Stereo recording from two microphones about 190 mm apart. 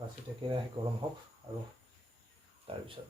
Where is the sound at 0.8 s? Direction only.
15° right (ahead or behind).